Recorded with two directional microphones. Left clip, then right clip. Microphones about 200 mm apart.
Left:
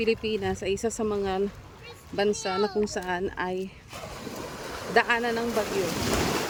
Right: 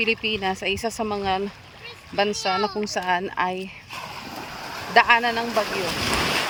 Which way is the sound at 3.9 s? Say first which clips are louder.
Right 4 dB; 55° left (ahead or behind).